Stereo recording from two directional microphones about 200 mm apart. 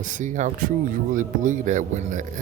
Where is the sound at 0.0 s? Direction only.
40° right (ahead or behind).